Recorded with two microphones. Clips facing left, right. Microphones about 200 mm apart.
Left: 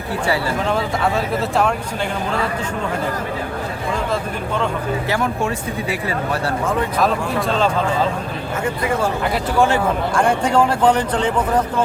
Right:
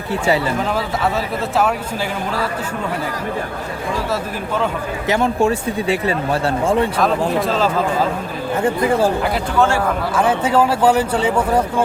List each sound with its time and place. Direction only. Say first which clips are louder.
0.7 s speech: even; 5° right (ahead or behind)
4.1 s speech: even; 5° right (ahead or behind)
5.0 s speech: right 8 dB; 20° right (ahead or behind)
7.3 s speech: right 1 dB; centre (ahead or behind)
8.6 s speech: right 5 dB; 30° right (ahead or behind)
9.6 s speech: even; 20° left (ahead or behind)
10.2 s speech: right 1 dB; 5° right (ahead or behind)